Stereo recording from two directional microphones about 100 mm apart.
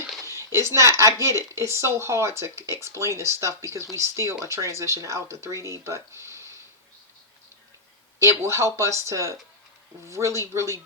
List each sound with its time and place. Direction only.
0.3 s a woman's voice: 30° right (ahead or behind)
8.2 s speech: 30° right (ahead or behind)